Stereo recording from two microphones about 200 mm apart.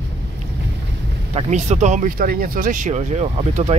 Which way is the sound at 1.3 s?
35° right (ahead or behind).